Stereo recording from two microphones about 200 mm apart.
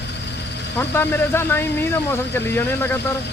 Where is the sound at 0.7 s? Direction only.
10° left (ahead or behind).